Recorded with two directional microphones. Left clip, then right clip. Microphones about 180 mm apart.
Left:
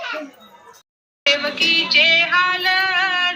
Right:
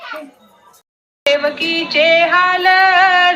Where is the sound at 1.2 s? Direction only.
45° right (ahead or behind).